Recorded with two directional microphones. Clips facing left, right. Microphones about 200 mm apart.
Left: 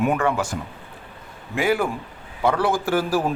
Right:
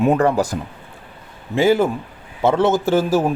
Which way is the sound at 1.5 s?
25° right (ahead or behind).